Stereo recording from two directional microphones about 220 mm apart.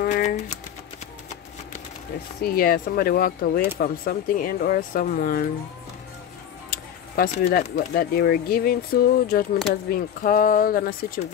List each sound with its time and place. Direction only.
0.0 s typewriter: 35° left (ahead or behind)
2.4 s speech: 45° left (ahead or behind)
6.7 s speech: 40° left (ahead or behind)